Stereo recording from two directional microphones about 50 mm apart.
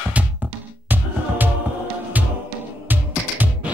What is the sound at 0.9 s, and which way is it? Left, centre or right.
Music, right.